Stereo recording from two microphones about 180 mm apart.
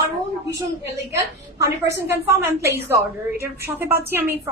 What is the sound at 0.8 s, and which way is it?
A woman's voice, 15° right (ahead or behind).